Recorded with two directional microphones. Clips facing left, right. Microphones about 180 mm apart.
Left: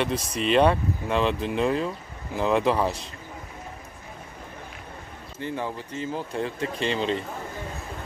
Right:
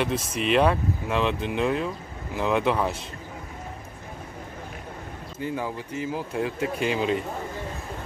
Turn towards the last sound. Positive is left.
turn(degrees=-5)  # may be behind; listen again after turning